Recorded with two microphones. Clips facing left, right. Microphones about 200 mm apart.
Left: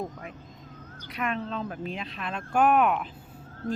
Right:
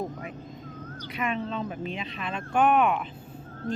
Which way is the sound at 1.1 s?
Centre (ahead or behind).